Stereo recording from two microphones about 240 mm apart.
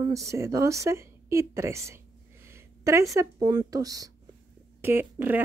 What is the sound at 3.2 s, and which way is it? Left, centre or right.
Speech, centre.